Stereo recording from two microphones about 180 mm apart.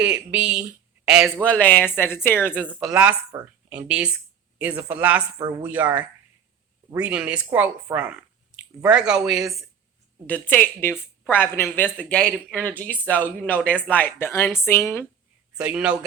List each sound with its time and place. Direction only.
0.0 s speech: 10° right (ahead or behind)
1.4 s speech: 10° left (ahead or behind)
2.6 s a woman's voice: 10° right (ahead or behind)
10.2 s speech: 10° left (ahead or behind)
15.5 s a woman's voice: 5° right (ahead or behind)